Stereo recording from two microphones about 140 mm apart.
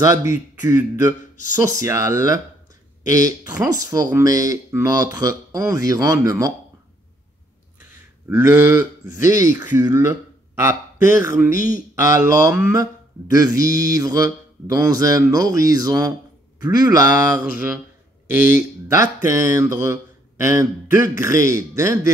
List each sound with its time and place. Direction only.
0.0 s speech: 25° right (ahead or behind)
8.3 s speech: 15° right (ahead or behind)
11.5 s speech: 75° left (ahead or behind)
11.9 s speech: 20° right (ahead or behind)
17.5 s speech: 10° right (ahead or behind)